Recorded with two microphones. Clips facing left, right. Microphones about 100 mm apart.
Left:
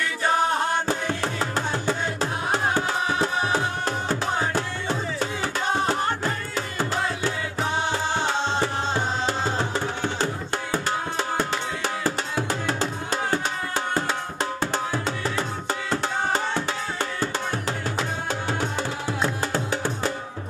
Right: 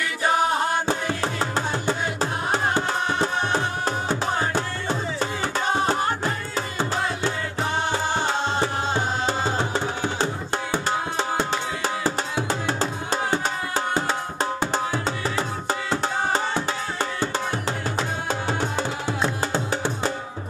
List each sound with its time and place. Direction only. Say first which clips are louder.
0.0 s music: right 1 dB; 5° right (ahead or behind)
10.9 s music: right 3 dB; 25° right (ahead or behind)
14.9 s music: right 1 dB; centre (ahead or behind)
17.6 s music: right 1 dB; 35° right (ahead or behind)
19.7 s music: right 1 dB; 30° right (ahead or behind)